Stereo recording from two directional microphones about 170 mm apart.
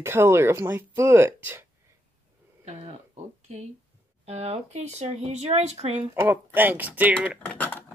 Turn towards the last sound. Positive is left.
turn(degrees=10)  # may be behind; listen again after turning